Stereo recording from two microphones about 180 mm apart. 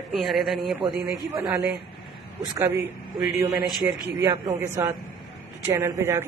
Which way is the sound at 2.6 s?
10° right (ahead or behind).